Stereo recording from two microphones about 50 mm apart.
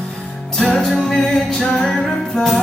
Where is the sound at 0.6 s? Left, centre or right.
Centre.